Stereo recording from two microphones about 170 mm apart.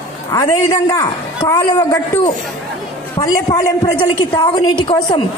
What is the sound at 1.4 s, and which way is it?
Speech, 20° left (ahead or behind).